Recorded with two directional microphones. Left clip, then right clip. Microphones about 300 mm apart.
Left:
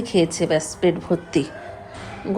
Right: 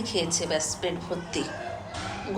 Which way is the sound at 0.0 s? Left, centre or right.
Left.